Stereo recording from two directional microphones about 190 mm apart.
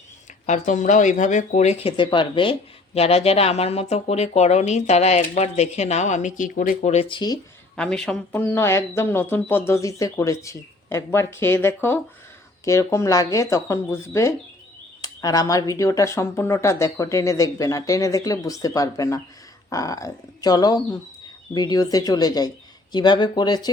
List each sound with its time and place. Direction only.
0.4 s speech: 40° left (ahead or behind); by 7.3 s 25° left (ahead or behind)
7.8 s speech: 5° left (ahead or behind); by 23.7 s 20° left (ahead or behind)